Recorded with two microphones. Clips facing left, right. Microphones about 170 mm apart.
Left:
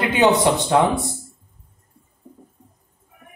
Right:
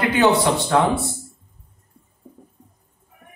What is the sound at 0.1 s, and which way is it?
Speech, 20° left (ahead or behind).